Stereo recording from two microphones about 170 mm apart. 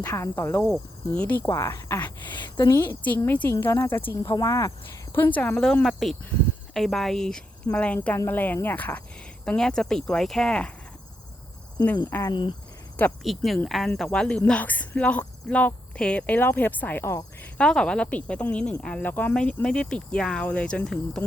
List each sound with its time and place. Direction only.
0.0 s speech: 15° left (ahead or behind)
0.6 s speech: centre (ahead or behind)
12.3 s speech: 25° left (ahead or behind)
13.2 s speech: centre (ahead or behind)